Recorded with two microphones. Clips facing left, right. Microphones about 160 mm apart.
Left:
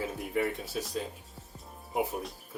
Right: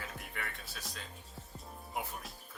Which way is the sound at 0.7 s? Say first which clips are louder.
Left 14 dB; 10° left (ahead or behind).